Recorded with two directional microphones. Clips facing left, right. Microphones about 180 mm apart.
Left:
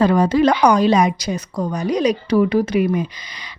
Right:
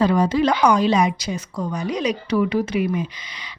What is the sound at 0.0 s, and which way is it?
A woman's voice, 50° left (ahead or behind).